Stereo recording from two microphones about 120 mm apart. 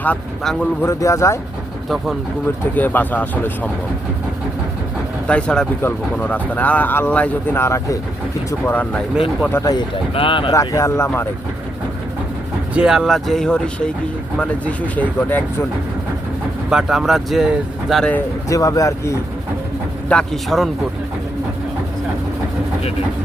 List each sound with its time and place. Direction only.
0.0 s speech: 10° left (ahead or behind)
0.9 s speech: 25° left (ahead or behind)
2.7 s speech: 15° left (ahead or behind)
5.3 s speech: 10° left (ahead or behind)
7.6 s speech: 25° left (ahead or behind)
9.6 s speech: 40° left (ahead or behind)
10.5 s speech: 30° left (ahead or behind)
12.7 s speech: 5° right (ahead or behind); by 15.4 s 15° left (ahead or behind)
16.6 s speech: 5° right (ahead or behind)
18.4 s speech: 30° left (ahead or behind)
20.1 s speech: 5° left (ahead or behind)